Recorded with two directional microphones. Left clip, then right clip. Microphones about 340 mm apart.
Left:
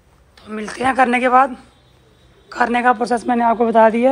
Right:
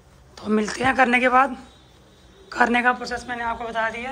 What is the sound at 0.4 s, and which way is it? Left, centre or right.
Speech, centre.